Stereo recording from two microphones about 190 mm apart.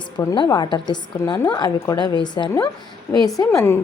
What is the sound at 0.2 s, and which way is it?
A woman's voice, 20° left (ahead or behind).